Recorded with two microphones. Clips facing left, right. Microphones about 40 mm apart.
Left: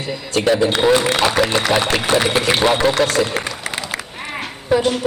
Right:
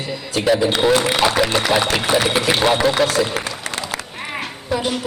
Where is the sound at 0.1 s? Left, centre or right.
Centre.